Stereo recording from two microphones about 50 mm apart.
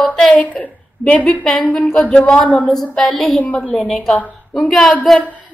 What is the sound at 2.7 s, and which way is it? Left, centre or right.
A woman's voice, centre.